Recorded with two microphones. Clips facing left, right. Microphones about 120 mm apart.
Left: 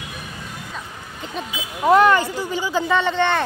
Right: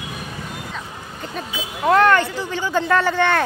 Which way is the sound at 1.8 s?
10° left (ahead or behind).